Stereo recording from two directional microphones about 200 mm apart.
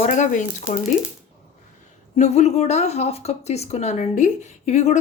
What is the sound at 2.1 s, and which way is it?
Speech, 35° left (ahead or behind).